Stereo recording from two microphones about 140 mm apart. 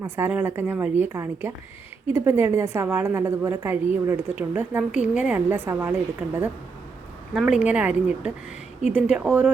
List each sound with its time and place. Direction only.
0.0 s a woman's voice: 15° right (ahead or behind)